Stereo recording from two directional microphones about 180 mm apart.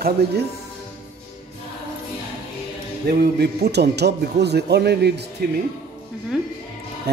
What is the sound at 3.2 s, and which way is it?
A man's voice, 65° right (ahead or behind).